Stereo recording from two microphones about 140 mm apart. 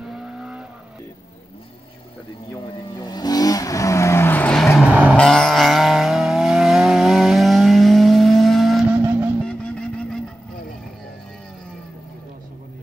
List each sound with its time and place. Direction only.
0.2 s vehicle: 5° right (ahead or behind)
2.5 s vehicle: 30° left (ahead or behind); by 4.6 s 10° left (ahead or behind)
4.7 s vehicle: 10° right (ahead or behind)
5.1 s vehicle: 5° left (ahead or behind)
8.9 s vehicle: 15° right (ahead or behind)